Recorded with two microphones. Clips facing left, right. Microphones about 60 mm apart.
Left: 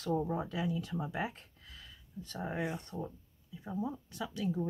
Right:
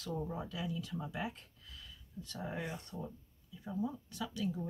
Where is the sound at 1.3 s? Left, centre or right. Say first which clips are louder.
Left 1 dB; left.